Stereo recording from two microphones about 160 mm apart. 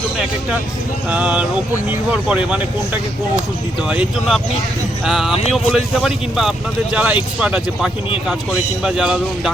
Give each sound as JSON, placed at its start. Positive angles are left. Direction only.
{"t": 1.1, "sound": "speech", "side_deg": -10}